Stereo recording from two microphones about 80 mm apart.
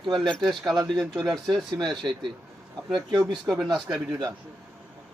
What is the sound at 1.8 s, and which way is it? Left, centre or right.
Speech, right.